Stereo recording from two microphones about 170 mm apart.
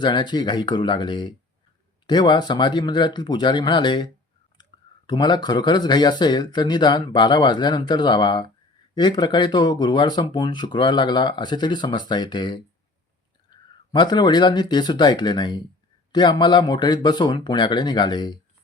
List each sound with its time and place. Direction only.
0.0 s speech: 25° left (ahead or behind)